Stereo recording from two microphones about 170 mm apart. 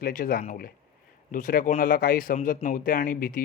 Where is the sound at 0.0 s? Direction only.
60° left (ahead or behind).